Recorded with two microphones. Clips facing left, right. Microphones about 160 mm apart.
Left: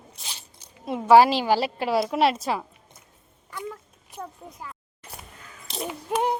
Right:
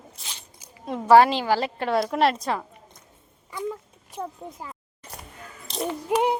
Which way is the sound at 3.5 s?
5° right (ahead or behind).